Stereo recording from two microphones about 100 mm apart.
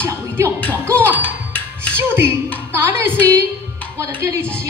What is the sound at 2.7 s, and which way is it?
Speech, 25° right (ahead or behind).